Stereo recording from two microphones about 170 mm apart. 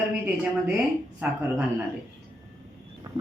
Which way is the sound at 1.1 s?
5° right (ahead or behind).